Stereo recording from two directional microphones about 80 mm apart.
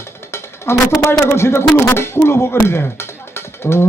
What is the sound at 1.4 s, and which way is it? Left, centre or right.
Speech, left.